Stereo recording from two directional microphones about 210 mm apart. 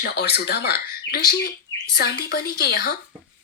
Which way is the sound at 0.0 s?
50° left (ahead or behind).